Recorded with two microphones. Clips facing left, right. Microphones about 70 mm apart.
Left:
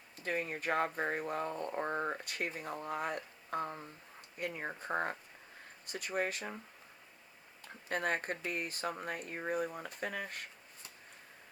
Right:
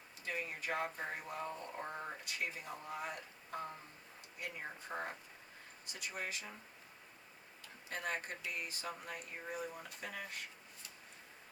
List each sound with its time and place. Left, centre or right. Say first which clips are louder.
0.2 s speech: left 6 dB; left
7.9 s speech: left 6 dB; left